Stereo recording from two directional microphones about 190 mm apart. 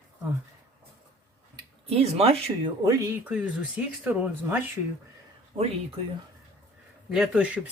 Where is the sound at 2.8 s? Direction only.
15° right (ahead or behind).